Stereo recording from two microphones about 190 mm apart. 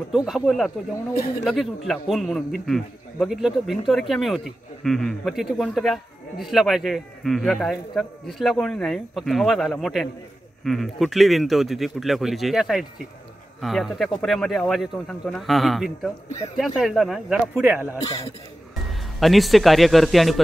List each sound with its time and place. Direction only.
0.1 s speech: centre (ahead or behind)
17.9 s speech: 20° left (ahead or behind)
19.1 s speech: centre (ahead or behind)